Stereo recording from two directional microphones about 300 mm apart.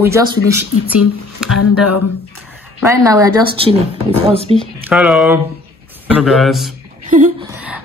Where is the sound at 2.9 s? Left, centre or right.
Centre.